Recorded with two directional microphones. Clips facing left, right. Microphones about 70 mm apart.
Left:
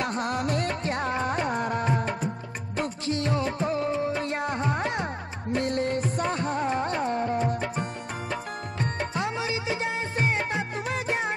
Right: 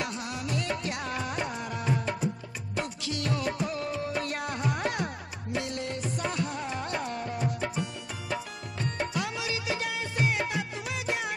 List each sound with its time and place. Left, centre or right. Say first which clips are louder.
0.0 s music: left 7 dB; left
5.6 s music: left 7 dB; left
9.1 s music: left 4 dB; left